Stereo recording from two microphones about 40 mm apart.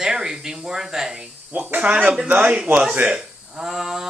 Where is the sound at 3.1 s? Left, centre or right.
Right.